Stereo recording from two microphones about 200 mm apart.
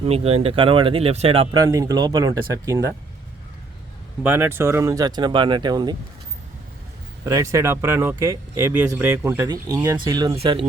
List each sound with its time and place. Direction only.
0.0 s speech: 30° right (ahead or behind)
4.2 s speech: 10° right (ahead or behind)
7.3 s speech: 15° right (ahead or behind)